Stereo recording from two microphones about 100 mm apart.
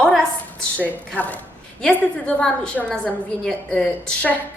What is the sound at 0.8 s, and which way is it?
A woman's voice, 15° left (ahead or behind).